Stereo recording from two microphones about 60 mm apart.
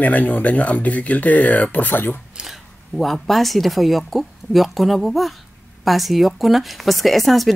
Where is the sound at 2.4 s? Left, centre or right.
Centre.